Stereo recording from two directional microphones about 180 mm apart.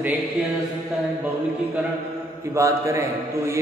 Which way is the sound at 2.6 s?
15° right (ahead or behind).